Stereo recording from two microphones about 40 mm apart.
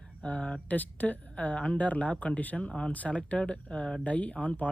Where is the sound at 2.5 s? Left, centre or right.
Left.